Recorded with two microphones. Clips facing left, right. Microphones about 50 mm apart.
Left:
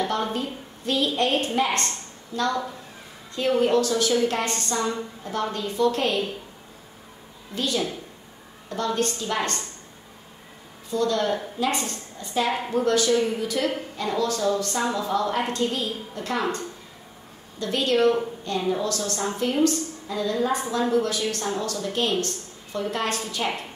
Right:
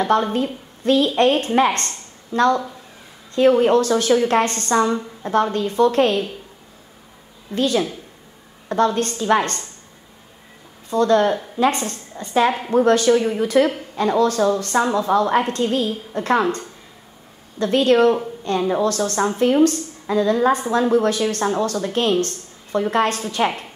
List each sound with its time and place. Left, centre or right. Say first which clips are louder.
0.0 s a woman's voice: right 7 dB; right
7.5 s a woman's voice: right 7 dB; right
10.9 s a woman's voice: right 7 dB; right
17.6 s a woman's voice: right 7 dB; right